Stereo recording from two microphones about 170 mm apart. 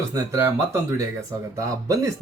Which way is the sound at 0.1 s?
15° right (ahead or behind).